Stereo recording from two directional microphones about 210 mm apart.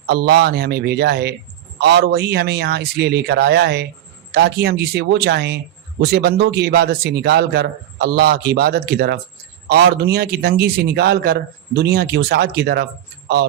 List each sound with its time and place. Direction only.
0.1 s a man's voice: 50° right (ahead or behind)